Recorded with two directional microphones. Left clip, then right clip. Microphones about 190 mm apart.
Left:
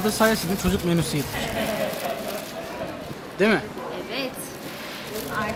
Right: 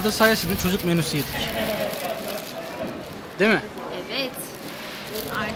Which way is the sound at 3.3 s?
10° right (ahead or behind).